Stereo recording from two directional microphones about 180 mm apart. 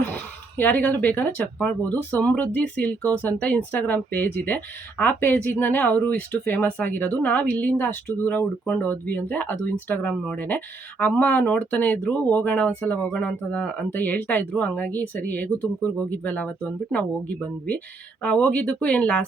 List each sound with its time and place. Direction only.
0.1 s speech: 10° left (ahead or behind)